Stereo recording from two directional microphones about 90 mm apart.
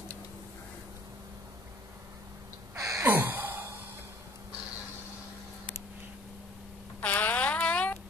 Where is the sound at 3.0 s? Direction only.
20° right (ahead or behind).